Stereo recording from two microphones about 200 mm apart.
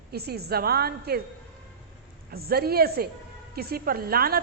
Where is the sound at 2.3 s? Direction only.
50° right (ahead or behind).